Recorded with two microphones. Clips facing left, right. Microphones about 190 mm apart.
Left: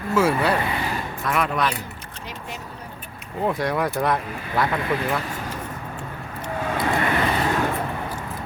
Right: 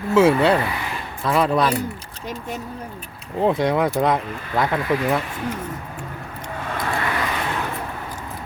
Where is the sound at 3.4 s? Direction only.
20° right (ahead or behind).